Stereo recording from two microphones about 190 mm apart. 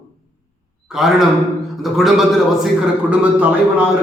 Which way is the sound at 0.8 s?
Centre (ahead or behind).